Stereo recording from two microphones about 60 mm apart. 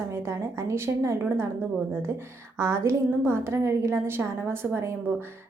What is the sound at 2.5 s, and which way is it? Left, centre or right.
A woman's voice, right.